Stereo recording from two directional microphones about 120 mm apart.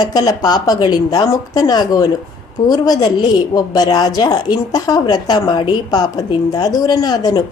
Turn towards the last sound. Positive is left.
turn(degrees=30)  # may be behind; listen again after turning